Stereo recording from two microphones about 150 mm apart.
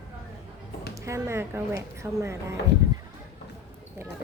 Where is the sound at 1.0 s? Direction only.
20° right (ahead or behind).